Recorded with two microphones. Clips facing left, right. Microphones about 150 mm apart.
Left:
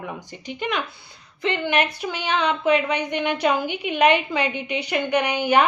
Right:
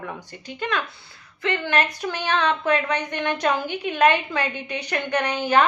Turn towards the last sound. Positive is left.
turn(degrees=15)  # may be behind; listen again after turning